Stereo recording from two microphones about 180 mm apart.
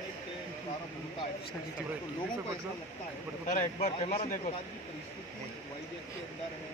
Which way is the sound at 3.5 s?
40° left (ahead or behind).